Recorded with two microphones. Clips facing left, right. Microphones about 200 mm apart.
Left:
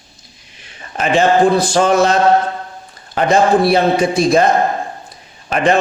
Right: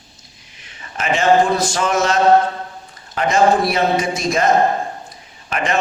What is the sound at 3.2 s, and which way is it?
A man's voice, 30° left (ahead or behind).